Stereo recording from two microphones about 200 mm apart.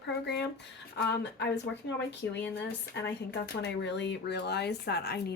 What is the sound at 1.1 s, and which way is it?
Speech, 60° left (ahead or behind).